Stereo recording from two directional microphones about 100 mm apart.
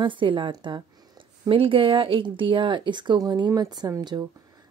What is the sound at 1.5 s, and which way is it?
A woman's voice, 65° right (ahead or behind).